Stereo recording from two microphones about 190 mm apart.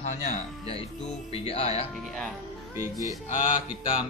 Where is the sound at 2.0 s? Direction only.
Centre (ahead or behind).